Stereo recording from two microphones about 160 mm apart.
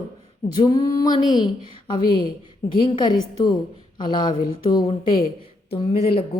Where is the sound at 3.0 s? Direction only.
25° left (ahead or behind).